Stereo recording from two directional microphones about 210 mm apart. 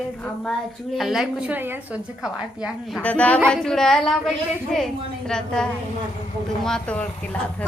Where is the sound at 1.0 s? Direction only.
Centre (ahead or behind).